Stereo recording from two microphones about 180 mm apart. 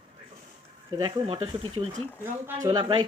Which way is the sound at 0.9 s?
25° right (ahead or behind).